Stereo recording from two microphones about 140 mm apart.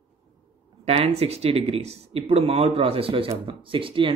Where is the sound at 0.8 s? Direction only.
45° right (ahead or behind).